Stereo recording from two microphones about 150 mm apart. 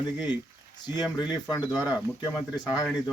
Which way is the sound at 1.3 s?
30° left (ahead or behind).